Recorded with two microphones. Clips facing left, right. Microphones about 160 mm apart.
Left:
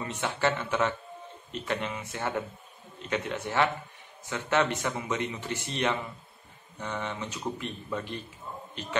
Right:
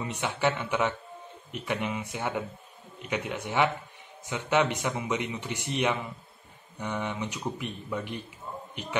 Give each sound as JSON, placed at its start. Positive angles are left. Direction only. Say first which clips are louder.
{"t": 0.0, "sound": "a man's voice", "louder": "right 1 dB", "side_deg": -15}